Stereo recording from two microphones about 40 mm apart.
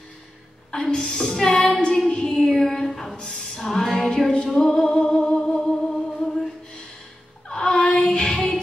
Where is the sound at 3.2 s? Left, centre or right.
Centre.